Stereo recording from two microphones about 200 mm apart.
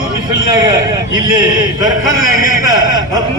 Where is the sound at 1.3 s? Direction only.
20° right (ahead or behind).